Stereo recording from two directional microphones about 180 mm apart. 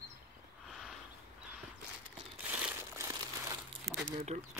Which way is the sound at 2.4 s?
15° right (ahead or behind).